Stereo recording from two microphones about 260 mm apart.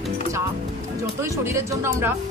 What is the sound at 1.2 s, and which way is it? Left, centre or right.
Speech, centre.